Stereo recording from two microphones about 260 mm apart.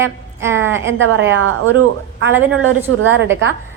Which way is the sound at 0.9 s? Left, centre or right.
Right.